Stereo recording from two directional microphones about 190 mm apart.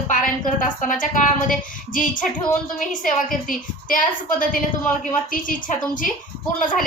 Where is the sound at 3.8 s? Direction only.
45° left (ahead or behind).